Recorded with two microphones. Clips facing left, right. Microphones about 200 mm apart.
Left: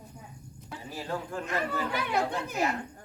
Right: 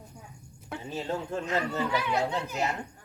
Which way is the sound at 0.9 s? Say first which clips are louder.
Right 3 dB; 25° right (ahead or behind).